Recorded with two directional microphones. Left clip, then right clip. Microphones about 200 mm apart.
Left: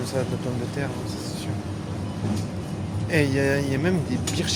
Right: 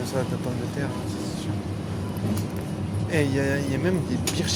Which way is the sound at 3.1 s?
20° left (ahead or behind).